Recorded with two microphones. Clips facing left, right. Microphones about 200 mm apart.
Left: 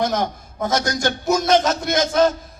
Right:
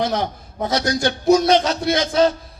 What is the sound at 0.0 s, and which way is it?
A man's voice, 45° left (ahead or behind).